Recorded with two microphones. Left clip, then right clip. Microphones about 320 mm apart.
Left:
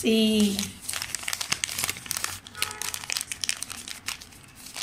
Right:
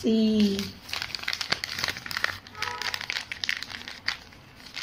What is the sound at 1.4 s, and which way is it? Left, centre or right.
Crumpling, centre.